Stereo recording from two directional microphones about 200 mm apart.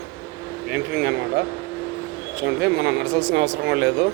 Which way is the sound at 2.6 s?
70° right (ahead or behind).